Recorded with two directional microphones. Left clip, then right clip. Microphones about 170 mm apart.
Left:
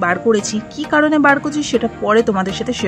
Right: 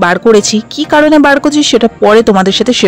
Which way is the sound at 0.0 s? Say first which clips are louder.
Right 9 dB; 55° right (ahead or behind).